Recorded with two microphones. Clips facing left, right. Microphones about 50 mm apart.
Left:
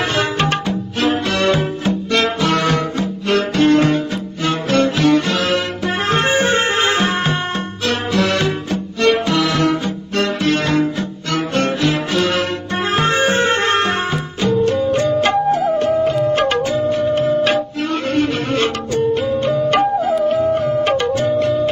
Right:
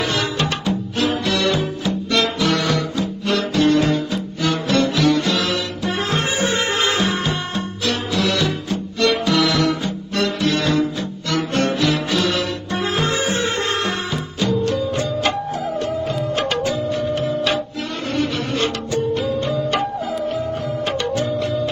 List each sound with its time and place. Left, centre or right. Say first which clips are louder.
0.2 s music: left 4 dB; left